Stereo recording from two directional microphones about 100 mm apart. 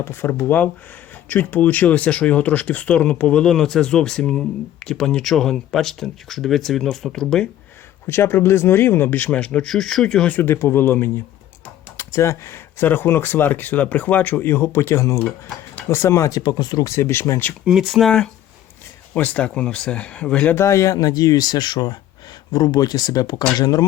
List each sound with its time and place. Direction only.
0.0 s speech: 25° left (ahead or behind); by 7.4 s 5° left (ahead or behind)
8.0 s speech: 25° left (ahead or behind); by 10.3 s 5° left (ahead or behind)
10.3 s speech: 25° left (ahead or behind)
16.4 s speech: 45° left (ahead or behind)
16.9 s speech: 25° left (ahead or behind)
17.7 s speech: 5° right (ahead or behind)
20.6 s speech: 30° left (ahead or behind)